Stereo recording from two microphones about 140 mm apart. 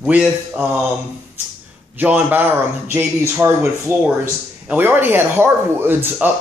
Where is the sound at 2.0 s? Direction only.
10° right (ahead or behind).